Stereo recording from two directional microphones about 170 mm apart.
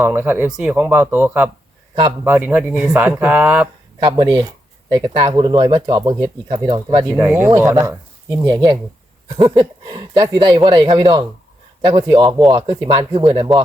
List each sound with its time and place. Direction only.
0.0 s speech: 10° right (ahead or behind)
4.0 s speech: 25° right (ahead or behind)
7.2 s speech: 10° right (ahead or behind)